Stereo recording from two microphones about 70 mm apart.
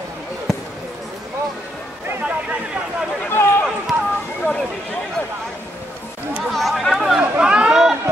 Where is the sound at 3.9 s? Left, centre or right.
Right.